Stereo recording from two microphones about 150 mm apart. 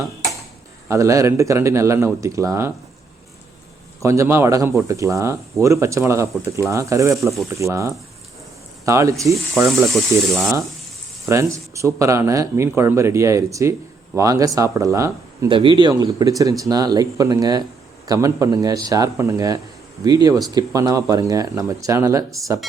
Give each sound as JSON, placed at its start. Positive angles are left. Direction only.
{"t": 0.9, "sound": "speech", "side_deg": -20}
{"t": 4.0, "sound": "speech", "side_deg": -20}
{"t": 9.6, "sound": "speech", "side_deg": 0}
{"t": 11.3, "sound": "speech", "side_deg": -20}
{"t": 15.4, "sound": "speech", "side_deg": -35}